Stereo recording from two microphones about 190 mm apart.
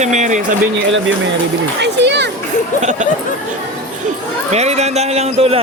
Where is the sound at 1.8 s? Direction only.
65° right (ahead or behind).